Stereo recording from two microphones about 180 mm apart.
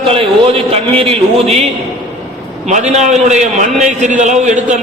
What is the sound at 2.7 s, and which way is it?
A man's voice, 40° right (ahead or behind).